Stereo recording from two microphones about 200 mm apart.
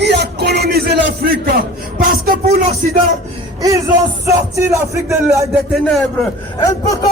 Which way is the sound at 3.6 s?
15° right (ahead or behind).